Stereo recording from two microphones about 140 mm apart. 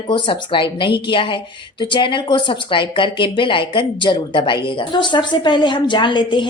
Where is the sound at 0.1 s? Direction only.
35° left (ahead or behind).